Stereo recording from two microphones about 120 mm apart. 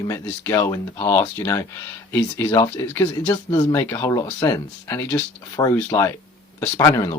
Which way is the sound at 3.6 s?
30° left (ahead or behind).